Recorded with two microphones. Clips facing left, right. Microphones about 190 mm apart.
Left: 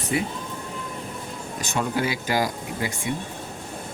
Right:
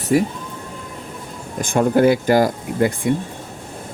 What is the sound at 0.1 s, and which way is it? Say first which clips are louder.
Speech: right 9 dB; 40° right (ahead or behind).